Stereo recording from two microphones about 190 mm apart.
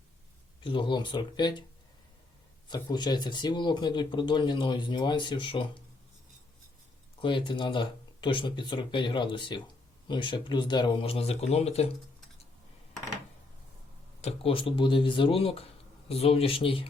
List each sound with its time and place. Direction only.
0.6 s speech: 25° left (ahead or behind)
2.6 s speech: 20° left (ahead or behind)
7.2 s speech: 25° left (ahead or behind)
14.2 s speech: 30° left (ahead or behind)